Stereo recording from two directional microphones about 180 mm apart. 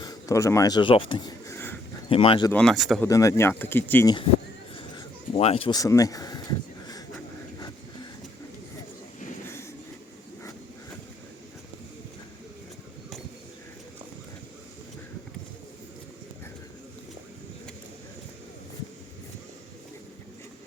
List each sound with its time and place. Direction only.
0.0 s speech: 20° left (ahead or behind)
1.5 s a sound: 10° left (ahead or behind)
2.0 s speech: 30° left (ahead or behind)
2.5 s speech: 5° left (ahead or behind)
3.0 s speech: 15° left (ahead or behind)
5.3 s a sound: 35° left (ahead or behind)